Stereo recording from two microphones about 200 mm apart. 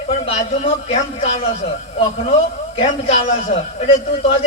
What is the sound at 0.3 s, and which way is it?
Speech, 30° left (ahead or behind).